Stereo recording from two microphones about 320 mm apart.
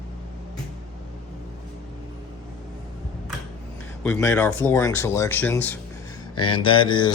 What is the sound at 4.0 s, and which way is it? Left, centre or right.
Speech, centre.